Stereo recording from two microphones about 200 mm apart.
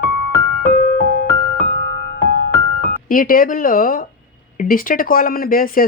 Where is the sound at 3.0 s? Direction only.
45° left (ahead or behind).